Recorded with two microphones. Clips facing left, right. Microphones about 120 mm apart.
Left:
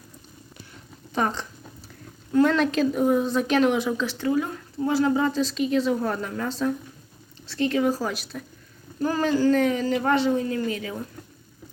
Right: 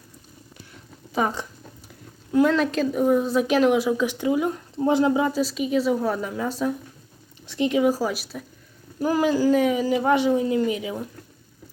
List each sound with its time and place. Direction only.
1.1 s a woman's voice: 10° right (ahead or behind)
4.0 s speech: 15° right (ahead or behind)